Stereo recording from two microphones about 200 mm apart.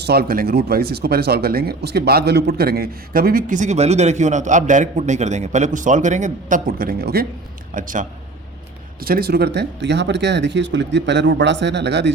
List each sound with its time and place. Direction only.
0.0 s speech: 50° right (ahead or behind)
9.0 s speech: 50° right (ahead or behind)